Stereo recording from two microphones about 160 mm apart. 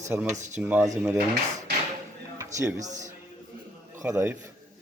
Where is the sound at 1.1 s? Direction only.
75° right (ahead or behind).